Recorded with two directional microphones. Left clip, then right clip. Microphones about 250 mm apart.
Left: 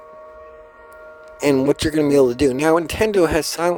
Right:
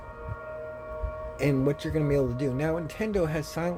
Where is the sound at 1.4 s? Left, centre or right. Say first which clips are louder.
Left 10 dB; left.